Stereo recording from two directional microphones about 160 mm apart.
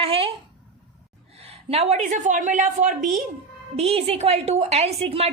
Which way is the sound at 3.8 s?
40° right (ahead or behind).